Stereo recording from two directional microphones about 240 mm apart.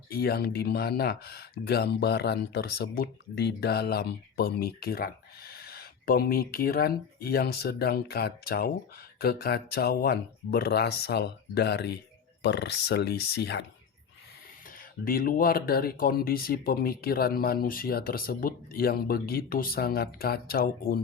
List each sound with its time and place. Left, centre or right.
0.1 s speech: left
15.0 s speech: left